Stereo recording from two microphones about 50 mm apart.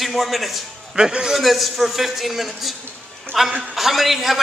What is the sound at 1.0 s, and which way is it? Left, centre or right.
Speech, centre.